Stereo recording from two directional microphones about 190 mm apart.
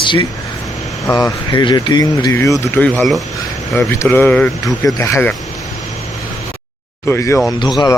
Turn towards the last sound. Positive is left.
turn(degrees=20)  # may be behind; listen again after turning